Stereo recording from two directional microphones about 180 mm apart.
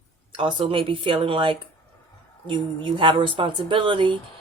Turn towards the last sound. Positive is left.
turn(degrees=-25)  # may be behind; listen again after turning